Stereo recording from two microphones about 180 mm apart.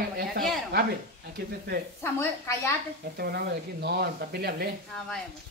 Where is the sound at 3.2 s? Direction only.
60° right (ahead or behind).